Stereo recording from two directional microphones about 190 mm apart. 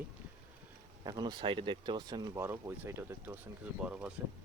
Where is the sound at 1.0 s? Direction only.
20° right (ahead or behind).